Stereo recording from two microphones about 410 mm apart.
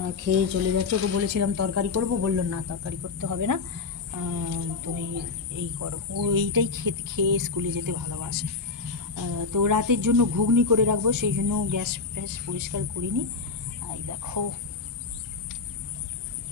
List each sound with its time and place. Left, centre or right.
0.3 s speech: right